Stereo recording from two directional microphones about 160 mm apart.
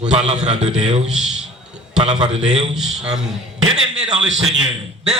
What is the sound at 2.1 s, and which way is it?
Speech, 30° right (ahead or behind).